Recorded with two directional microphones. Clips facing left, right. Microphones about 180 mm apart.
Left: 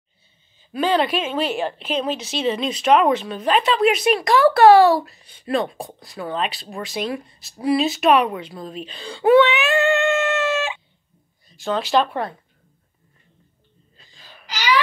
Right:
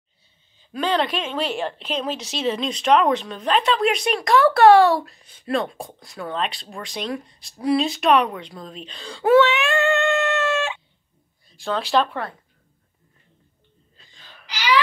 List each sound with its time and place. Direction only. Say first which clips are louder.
0.6 s a woman's voice: left 3 dB; 5° left (ahead or behind)
13.9 s wail: left 2 dB; 5° left (ahead or behind)
14.4 s speech: even; 45° left (ahead or behind)